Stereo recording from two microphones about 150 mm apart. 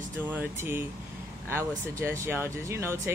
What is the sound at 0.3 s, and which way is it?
Speech, 15° right (ahead or behind).